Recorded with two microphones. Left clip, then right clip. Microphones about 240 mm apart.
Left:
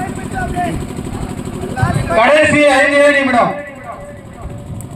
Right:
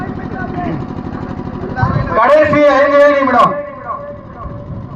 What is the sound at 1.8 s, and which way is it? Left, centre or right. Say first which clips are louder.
A man's voice: even; left.